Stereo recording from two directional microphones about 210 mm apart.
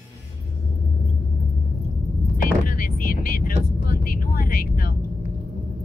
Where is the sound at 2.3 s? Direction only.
40° left (ahead or behind).